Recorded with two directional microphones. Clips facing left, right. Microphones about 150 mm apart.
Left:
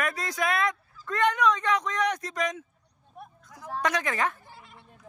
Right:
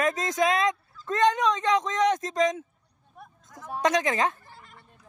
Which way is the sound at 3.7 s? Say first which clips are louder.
Right 4 dB; 20° right (ahead or behind).